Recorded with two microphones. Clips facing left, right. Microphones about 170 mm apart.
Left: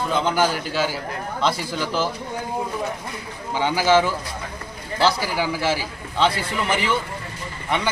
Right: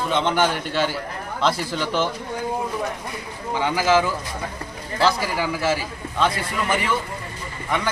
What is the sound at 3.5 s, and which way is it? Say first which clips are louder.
Speech: left 1 dB; 5° left (ahead or behind).